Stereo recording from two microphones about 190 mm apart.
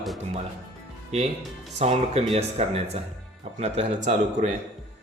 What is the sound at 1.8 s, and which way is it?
Speech, 35° right (ahead or behind).